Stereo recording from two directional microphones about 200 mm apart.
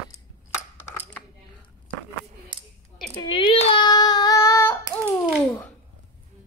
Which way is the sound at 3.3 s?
30° left (ahead or behind).